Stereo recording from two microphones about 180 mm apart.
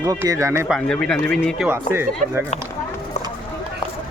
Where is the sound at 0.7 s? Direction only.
5° left (ahead or behind); by 2.5 s 10° right (ahead or behind).